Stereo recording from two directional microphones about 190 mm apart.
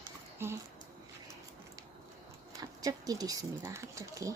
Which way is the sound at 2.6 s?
20° right (ahead or behind).